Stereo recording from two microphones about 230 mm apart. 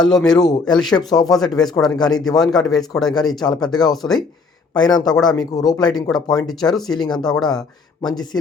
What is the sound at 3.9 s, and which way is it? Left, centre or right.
Speech, centre.